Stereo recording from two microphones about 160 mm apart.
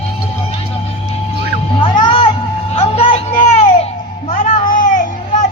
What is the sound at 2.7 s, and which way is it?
Vehicle, 35° left (ahead or behind).